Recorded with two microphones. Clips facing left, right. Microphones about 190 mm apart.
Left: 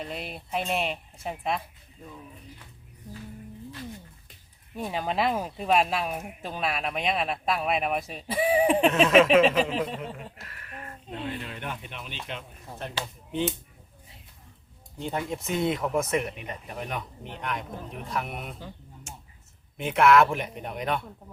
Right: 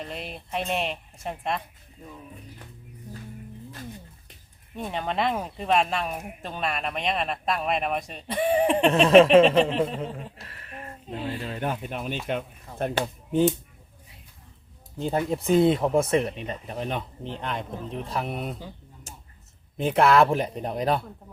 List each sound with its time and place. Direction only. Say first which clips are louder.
0.0 s speech: even; centre (ahead or behind)
4.7 s speech: even; 5° left (ahead or behind)
9.0 s speech: right 6 dB; 30° right (ahead or behind)
9.6 s speech: right 4 dB; 5° left (ahead or behind)
10.4 s a sound: right 2 dB; 30° right (ahead or behind)
11.3 s speech: right 7 dB; 35° right (ahead or behind); by 13.4 s 50° right (ahead or behind)
14.9 s speech: right 5 dB; 35° right (ahead or behind)
19.1 s a sound: left 1 dB; 35° right (ahead or behind)
19.7 s speech: right 1 dB; 30° right (ahead or behind)